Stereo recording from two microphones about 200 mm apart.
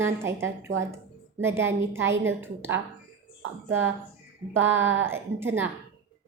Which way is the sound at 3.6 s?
75° right (ahead or behind).